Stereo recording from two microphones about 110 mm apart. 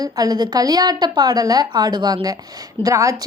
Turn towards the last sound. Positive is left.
turn(degrees=-30)  # may be behind; listen again after turning